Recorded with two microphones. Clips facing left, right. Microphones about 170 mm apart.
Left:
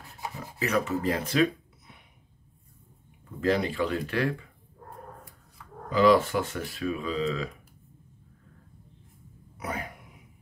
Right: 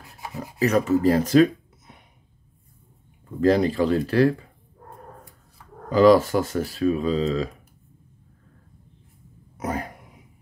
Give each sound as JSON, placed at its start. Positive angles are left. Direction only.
{"t": 0.6, "sound": "speech", "side_deg": -40}
{"t": 3.3, "sound": "speech", "side_deg": -40}
{"t": 5.9, "sound": "speech", "side_deg": -40}
{"t": 9.6, "sound": "a sound", "side_deg": -40}